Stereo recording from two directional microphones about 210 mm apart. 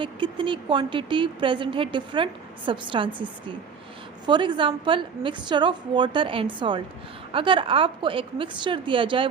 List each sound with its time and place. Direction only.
0.0 s a woman's voice: 25° right (ahead or behind)